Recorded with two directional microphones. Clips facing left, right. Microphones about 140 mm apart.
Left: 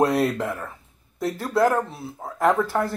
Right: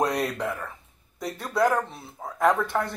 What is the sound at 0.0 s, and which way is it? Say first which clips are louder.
Speech: left 5 dB; centre (ahead or behind).